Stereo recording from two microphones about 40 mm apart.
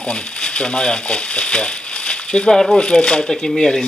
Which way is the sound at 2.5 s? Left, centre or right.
Centre.